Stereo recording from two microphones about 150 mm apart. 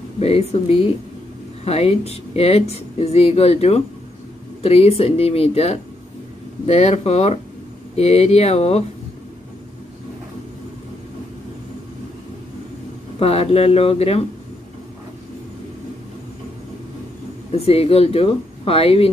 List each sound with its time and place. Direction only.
0.2 s speech: 45° left (ahead or behind)
13.2 s speech: 40° left (ahead or behind)
17.5 s speech: 40° left (ahead or behind)